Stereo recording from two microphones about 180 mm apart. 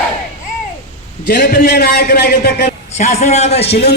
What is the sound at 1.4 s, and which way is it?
A man's voice, 55° left (ahead or behind).